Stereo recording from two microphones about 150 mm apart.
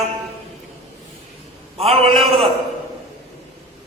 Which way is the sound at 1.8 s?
40° right (ahead or behind).